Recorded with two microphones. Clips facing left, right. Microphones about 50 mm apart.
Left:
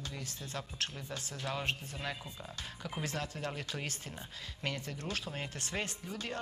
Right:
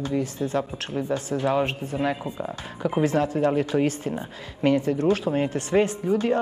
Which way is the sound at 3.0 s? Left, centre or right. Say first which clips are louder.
Right 17 dB; right.